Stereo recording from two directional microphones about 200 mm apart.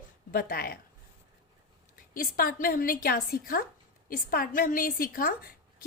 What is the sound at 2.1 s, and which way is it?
A woman's voice, 45° left (ahead or behind).